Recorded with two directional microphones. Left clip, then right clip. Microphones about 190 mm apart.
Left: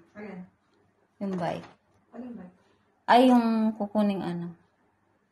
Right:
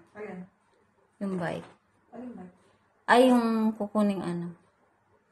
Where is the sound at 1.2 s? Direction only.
Centre (ahead or behind).